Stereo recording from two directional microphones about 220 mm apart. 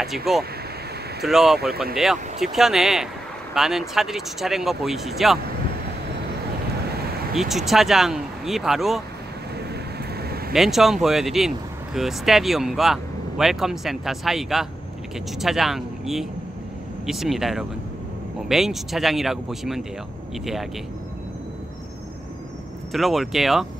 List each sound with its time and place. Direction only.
0.3 s speech: centre (ahead or behind)
6.9 s a sound: 45° right (ahead or behind)
7.3 s speech: centre (ahead or behind)
10.5 s speech: centre (ahead or behind)
22.9 s speech: centre (ahead or behind)